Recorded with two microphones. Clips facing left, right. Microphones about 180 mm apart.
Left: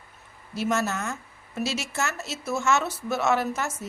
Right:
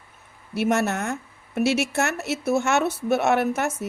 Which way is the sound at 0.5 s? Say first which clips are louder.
Right 4 dB; 65° right (ahead or behind).